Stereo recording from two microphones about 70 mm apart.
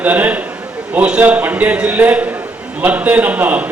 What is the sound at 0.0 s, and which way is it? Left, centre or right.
A man's voice, right.